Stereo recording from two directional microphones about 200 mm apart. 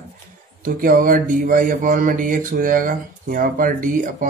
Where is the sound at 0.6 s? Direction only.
45° right (ahead or behind).